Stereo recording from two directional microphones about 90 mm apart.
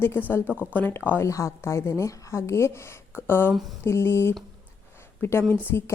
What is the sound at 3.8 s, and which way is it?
A woman's voice, 30° left (ahead or behind).